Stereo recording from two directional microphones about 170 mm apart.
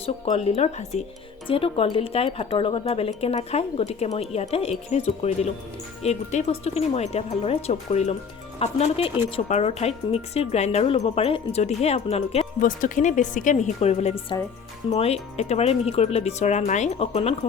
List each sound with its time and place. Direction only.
0.0 s speech: 35° left (ahead or behind)
12.6 s a woman's voice: 50° left (ahead or behind)